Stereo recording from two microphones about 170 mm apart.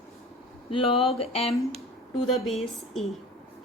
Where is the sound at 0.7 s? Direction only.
30° left (ahead or behind).